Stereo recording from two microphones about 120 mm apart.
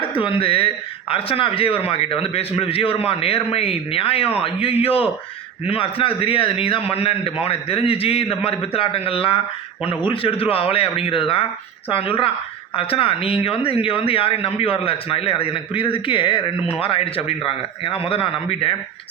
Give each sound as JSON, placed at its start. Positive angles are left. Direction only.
{"t": 0.2, "sound": "speech", "side_deg": 45}